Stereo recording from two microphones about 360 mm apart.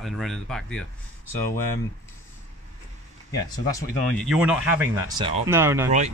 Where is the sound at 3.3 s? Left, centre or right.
Centre.